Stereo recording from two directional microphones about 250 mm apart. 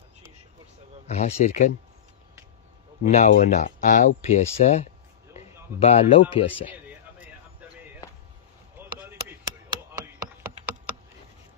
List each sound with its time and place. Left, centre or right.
1.0 s speech: left
3.0 s speech: left
5.4 s a sound: left
5.8 s speech: left
8.7 s chop: centre